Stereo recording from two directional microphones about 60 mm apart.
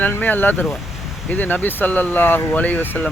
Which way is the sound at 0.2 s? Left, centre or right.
Left.